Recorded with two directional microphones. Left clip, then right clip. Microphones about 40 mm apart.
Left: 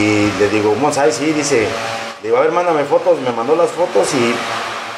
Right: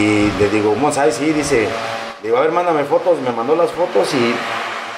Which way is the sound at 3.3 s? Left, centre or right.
Centre.